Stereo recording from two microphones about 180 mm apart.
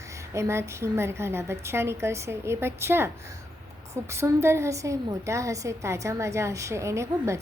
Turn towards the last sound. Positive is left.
turn(degrees=-15)  # may be behind; listen again after turning